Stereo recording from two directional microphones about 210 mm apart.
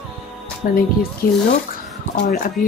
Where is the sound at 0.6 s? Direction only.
40° left (ahead or behind).